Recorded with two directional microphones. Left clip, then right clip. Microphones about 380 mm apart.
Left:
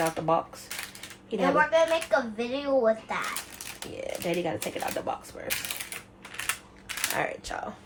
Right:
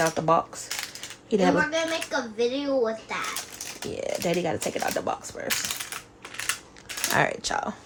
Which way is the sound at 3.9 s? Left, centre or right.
Right.